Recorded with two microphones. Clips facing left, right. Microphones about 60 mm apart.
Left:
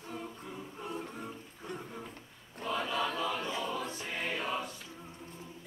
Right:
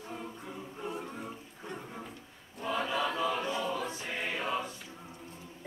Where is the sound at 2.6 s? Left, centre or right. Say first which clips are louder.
Right 2 dB; centre.